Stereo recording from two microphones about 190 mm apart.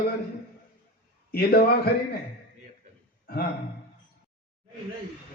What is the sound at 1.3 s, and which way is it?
Speech, 55° left (ahead or behind).